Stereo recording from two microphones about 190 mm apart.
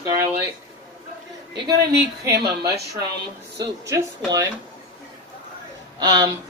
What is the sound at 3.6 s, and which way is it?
Speech, 15° right (ahead or behind).